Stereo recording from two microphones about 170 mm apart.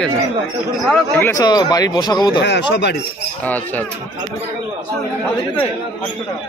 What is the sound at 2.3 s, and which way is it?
Speech, 85° left.